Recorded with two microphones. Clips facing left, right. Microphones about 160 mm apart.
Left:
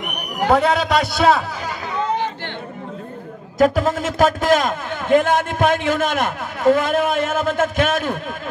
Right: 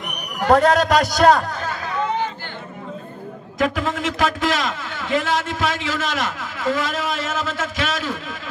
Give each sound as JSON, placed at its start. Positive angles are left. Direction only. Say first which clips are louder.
{"t": 0.5, "sound": "a man's voice", "louder": "right 2 dB", "side_deg": 0}
{"t": 3.5, "sound": "a man's voice", "louder": "left 6 dB", "side_deg": 40}